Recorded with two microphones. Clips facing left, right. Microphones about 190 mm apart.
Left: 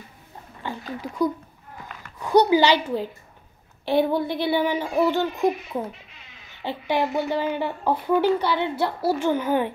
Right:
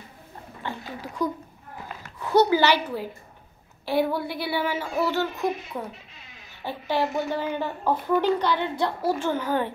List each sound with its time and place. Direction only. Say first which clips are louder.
1.0 s speech: left 4 dB; 10° left (ahead or behind)
2.3 s speech: left 2 dB; 15° left (ahead or behind)